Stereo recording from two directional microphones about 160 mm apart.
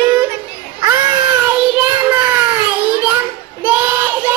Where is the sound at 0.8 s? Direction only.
10° right (ahead or behind).